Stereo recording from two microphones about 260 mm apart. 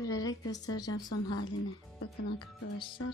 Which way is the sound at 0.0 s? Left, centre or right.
Centre.